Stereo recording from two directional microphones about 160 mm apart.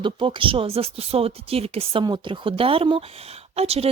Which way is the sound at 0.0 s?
30° right (ahead or behind).